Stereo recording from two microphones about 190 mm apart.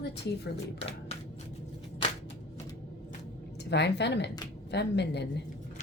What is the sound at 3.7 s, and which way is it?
A woman's voice, 65° left (ahead or behind).